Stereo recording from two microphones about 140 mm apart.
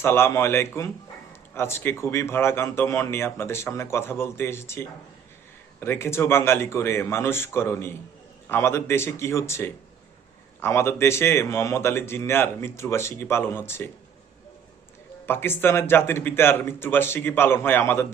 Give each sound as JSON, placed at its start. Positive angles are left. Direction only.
{"t": 0.0, "sound": "speech", "side_deg": 15}
{"t": 15.3, "sound": "speech", "side_deg": 15}